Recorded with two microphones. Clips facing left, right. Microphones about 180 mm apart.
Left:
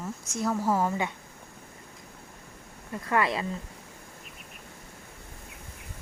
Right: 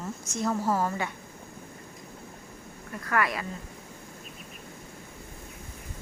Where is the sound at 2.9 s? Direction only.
25° left (ahead or behind).